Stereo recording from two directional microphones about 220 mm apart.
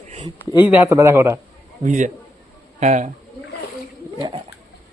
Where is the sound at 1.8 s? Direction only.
35° right (ahead or behind).